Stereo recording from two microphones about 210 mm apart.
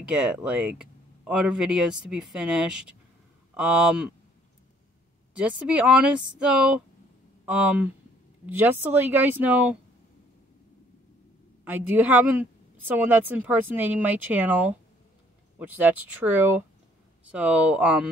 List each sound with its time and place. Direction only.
0.1 s speech: 5° right (ahead or behind)
5.3 s speech: 5° right (ahead or behind)
11.6 s speech: 10° right (ahead or behind)